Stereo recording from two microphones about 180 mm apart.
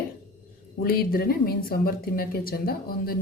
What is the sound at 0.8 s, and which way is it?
A woman's voice, 55° left (ahead or behind).